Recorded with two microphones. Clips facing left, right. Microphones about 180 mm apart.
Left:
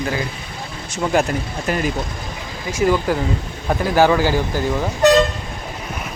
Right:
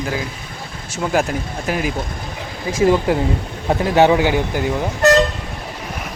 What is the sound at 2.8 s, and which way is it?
Speech, 25° right (ahead or behind).